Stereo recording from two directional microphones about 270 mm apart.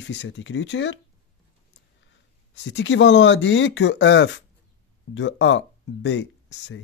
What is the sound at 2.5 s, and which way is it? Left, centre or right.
A man's voice, left.